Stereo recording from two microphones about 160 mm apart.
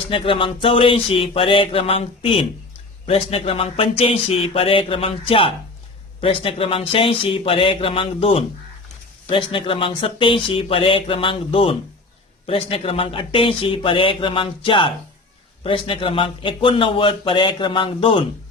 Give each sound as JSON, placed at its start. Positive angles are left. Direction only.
{"t": 0.1, "sound": "a man's voice", "side_deg": 35}